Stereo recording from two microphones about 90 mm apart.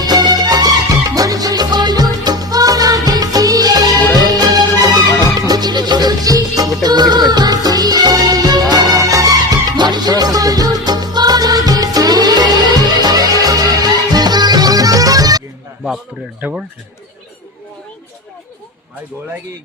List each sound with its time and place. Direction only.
0.0 s music: 50° right (ahead or behind)
16.4 s speech: 15° right (ahead or behind)